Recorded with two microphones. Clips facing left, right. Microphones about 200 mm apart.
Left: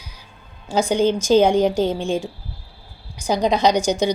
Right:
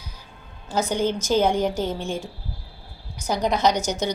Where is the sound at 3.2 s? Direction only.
15° left (ahead or behind).